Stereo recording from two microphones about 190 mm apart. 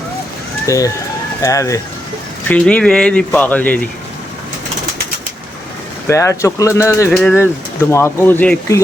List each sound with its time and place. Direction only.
0.7 s speech: 15° left (ahead or behind)
2.5 s speech: 5° left (ahead or behind)
6.1 s speech: 15° left (ahead or behind)